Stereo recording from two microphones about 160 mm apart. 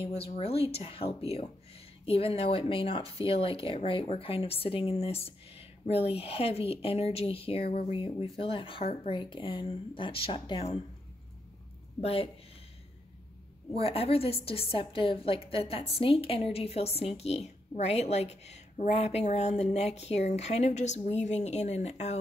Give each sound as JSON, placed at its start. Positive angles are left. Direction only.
{"t": 0.0, "sound": "speech", "side_deg": 40}
{"t": 12.0, "sound": "speech", "side_deg": 40}
{"t": 13.7, "sound": "a woman's voice", "side_deg": 35}